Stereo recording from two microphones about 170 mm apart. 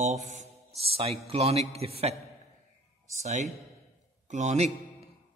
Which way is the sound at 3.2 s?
45° right (ahead or behind).